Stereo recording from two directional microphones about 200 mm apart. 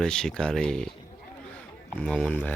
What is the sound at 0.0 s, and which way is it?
Speech, 5° left (ahead or behind).